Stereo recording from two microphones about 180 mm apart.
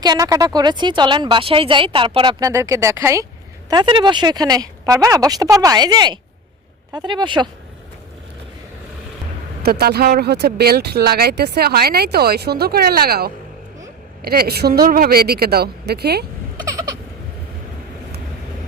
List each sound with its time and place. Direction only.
0.0 s speech: 20° right (ahead or behind)
3.7 s speech: 25° right (ahead or behind)
9.6 s speech: 60° right (ahead or behind)